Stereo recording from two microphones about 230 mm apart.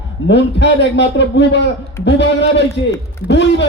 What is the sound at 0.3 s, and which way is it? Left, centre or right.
A man's voice, left.